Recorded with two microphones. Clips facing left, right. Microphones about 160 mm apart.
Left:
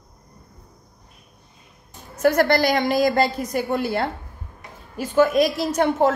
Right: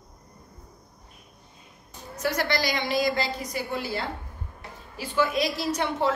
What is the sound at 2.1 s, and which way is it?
A woman's voice, 55° left (ahead or behind).